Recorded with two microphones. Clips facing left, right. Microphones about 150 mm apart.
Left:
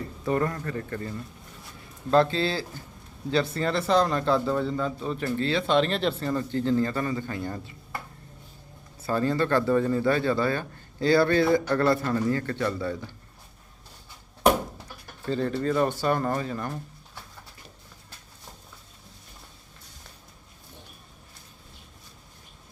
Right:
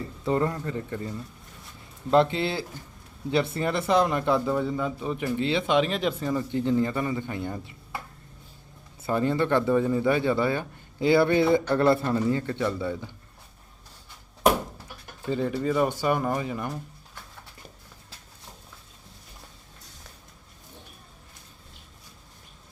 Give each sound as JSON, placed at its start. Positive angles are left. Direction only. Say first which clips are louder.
{"t": 0.3, "sound": "a man's voice", "louder": "right 1 dB", "side_deg": -20}
{"t": 9.0, "sound": "a man's voice", "louder": "right 1 dB", "side_deg": -20}
{"t": 15.3, "sound": "a man's voice", "louder": "even", "side_deg": -15}